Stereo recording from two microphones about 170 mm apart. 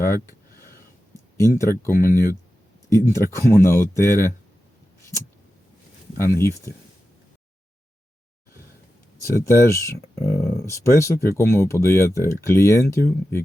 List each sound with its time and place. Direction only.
0.0 s a sound: 15° left (ahead or behind)
1.8 s speech: 15° left (ahead or behind)
6.1 s speech: 15° left (ahead or behind)
9.2 s speech: 15° left (ahead or behind)